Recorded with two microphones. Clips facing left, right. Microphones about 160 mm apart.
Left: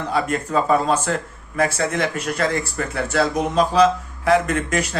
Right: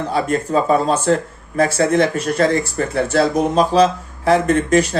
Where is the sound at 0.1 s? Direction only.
30° right (ahead or behind).